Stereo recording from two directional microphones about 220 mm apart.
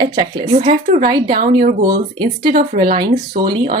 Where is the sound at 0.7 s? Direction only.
40° right (ahead or behind).